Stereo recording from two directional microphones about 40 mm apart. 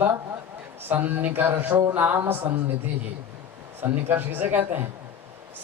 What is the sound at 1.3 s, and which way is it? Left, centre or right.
Speech, right.